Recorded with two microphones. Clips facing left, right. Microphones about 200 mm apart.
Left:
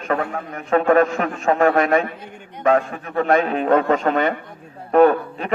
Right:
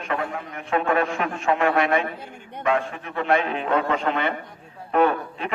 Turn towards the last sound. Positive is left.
turn(degrees=40)  # may be behind; listen again after turning